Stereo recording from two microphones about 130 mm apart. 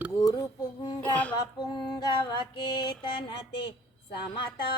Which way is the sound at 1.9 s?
35° left (ahead or behind).